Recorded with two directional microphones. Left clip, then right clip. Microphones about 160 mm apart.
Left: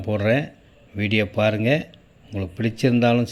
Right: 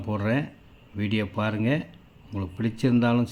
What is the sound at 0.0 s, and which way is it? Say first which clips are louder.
Speech: left 7 dB; 5° left (ahead or behind).